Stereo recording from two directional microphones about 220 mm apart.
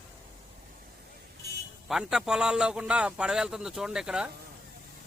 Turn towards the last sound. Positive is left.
turn(degrees=-5)  # may be behind; listen again after turning